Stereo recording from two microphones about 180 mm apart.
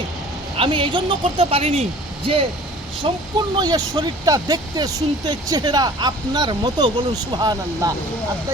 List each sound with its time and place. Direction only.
0.5 s speech: 30° right (ahead or behind)